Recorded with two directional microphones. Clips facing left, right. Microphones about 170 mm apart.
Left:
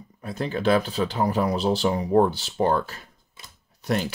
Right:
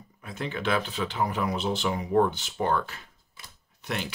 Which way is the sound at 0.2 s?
35° left (ahead or behind).